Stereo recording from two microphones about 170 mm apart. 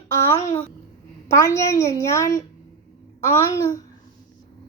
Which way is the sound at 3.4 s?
20° left (ahead or behind).